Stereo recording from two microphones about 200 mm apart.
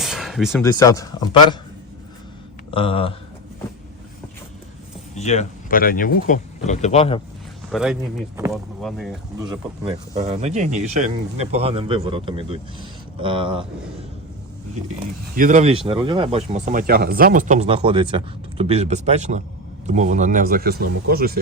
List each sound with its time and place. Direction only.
0.0 s a sound: centre (ahead or behind)
0.6 s speech: 15° left (ahead or behind)
2.6 s speech: 25° left (ahead or behind)
5.1 s speech: 35° left (ahead or behind)
7.7 s speech: 5° right (ahead or behind)
9.5 s speech: 25° right (ahead or behind)
15.4 s speech: 40° right (ahead or behind)
15.9 s speech: 25° right (ahead or behind); by 21.3 s 50° right (ahead or behind)